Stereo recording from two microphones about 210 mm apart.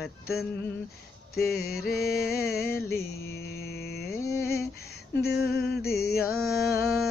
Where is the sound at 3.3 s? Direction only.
50° left (ahead or behind).